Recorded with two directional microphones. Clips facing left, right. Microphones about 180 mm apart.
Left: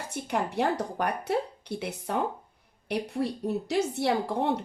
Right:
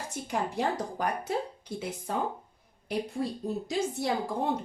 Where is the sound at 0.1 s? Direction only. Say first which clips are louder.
Left 3 dB; 65° left (ahead or behind).